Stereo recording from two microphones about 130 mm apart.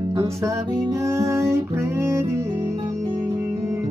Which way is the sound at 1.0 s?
25° right (ahead or behind).